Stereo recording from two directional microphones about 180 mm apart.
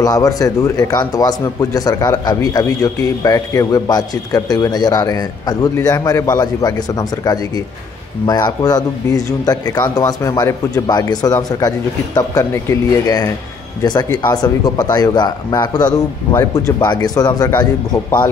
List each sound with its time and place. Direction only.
0.0 s speech: 20° left (ahead or behind)